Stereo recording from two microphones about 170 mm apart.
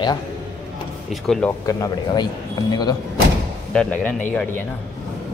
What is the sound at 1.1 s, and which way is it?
Speech, 5° left (ahead or behind).